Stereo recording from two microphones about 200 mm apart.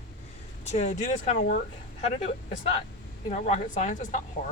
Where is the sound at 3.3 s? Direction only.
35° left (ahead or behind).